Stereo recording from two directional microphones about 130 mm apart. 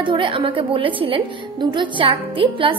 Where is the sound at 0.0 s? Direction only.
40° right (ahead or behind).